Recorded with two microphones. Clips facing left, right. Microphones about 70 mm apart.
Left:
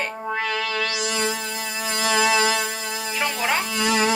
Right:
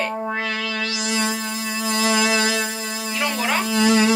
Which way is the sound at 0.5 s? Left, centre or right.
Left.